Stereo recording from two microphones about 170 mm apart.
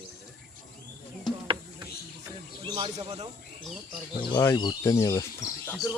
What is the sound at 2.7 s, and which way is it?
Speech, 30° right (ahead or behind).